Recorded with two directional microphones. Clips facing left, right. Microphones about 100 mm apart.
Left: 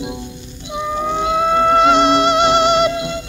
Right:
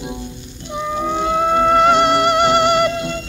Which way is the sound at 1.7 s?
20° left (ahead or behind).